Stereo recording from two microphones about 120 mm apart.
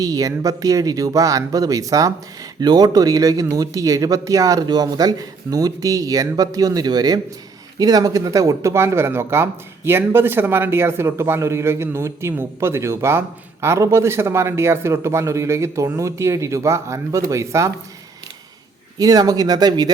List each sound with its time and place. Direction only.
0.0 s speech: 30° right (ahead or behind)
18.9 s speech: 30° right (ahead or behind)